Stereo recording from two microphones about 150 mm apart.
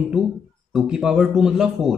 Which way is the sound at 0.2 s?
5° right (ahead or behind).